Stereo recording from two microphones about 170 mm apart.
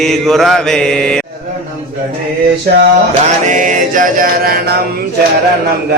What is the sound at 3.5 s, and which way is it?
Music, 50° right (ahead or behind).